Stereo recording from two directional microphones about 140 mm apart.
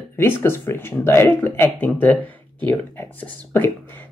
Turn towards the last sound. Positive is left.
turn(degrees=15)  # may be behind; listen again after turning